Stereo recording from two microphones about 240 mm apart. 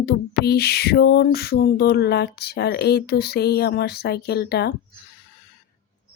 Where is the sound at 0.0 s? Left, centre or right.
Left.